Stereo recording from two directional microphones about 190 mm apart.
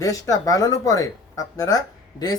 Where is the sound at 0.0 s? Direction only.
20° left (ahead or behind).